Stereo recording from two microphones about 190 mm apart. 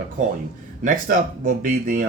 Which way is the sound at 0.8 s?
45° right (ahead or behind).